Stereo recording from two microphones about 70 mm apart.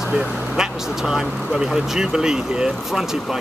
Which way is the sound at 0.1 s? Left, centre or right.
Centre.